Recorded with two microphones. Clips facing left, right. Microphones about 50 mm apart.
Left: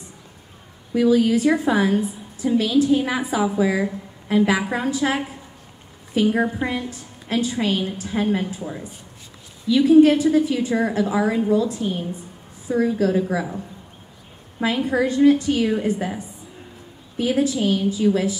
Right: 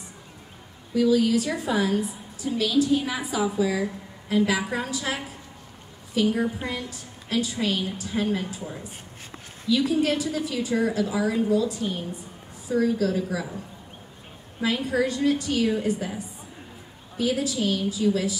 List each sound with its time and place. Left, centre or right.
0.9 s a woman's voice: left
9.7 s a woman's voice: left
14.6 s a woman's voice: left